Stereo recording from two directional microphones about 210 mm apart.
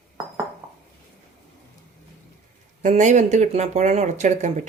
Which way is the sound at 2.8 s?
35° right (ahead or behind).